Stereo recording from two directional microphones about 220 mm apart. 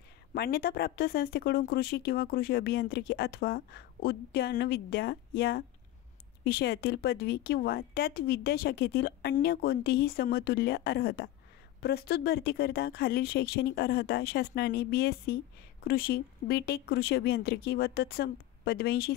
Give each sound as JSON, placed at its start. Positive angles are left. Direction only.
{"t": 0.3, "sound": "speech", "side_deg": 45}